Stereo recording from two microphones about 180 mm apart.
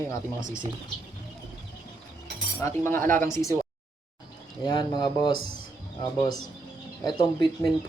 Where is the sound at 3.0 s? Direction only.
45° right (ahead or behind).